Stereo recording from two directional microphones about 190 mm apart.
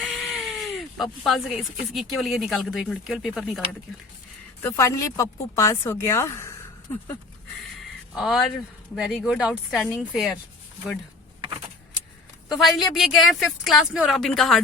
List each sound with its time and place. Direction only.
0.0 s speech: centre (ahead or behind)
4.6 s speech: 15° left (ahead or behind)
8.1 s speech: centre (ahead or behind)
12.5 s speech: centre (ahead or behind)